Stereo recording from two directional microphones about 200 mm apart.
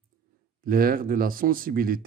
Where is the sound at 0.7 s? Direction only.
45° right (ahead or behind).